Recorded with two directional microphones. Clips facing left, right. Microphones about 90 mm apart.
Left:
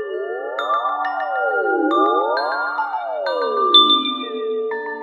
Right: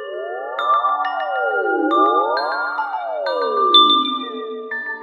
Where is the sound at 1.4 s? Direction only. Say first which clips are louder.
Left 1 dB; 20° left (ahead or behind).